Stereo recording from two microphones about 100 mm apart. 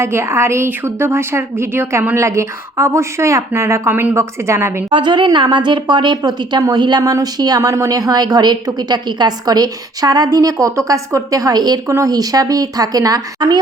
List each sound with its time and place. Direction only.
0.0 s speech: 25° right (ahead or behind)
4.9 s a woman's voice: 50° right (ahead or behind)